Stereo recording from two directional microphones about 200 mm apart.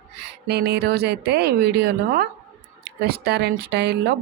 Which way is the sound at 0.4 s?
55° right (ahead or behind).